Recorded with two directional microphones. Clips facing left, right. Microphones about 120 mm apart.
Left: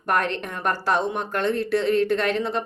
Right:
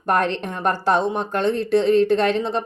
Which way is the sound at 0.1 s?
30° right (ahead or behind).